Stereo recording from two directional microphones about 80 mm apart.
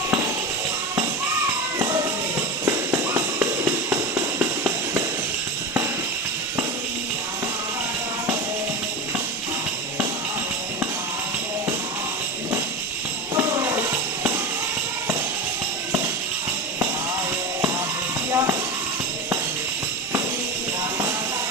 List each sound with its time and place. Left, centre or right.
3.2 s music: right
18.3 s hiss: right